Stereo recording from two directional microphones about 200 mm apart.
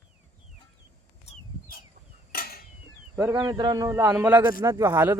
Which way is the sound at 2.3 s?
50° left (ahead or behind).